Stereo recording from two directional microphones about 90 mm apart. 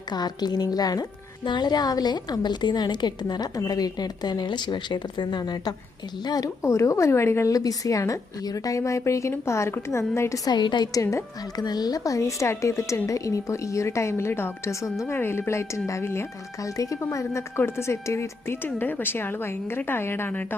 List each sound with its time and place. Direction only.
0.1 s a woman's voice: 50° left (ahead or behind)
10.5 s a woman's voice: 55° left (ahead or behind)
10.9 s a woman's voice: 35° left (ahead or behind)
11.5 s a woman's voice: 50° left (ahead or behind); by 20.6 s 25° left (ahead or behind)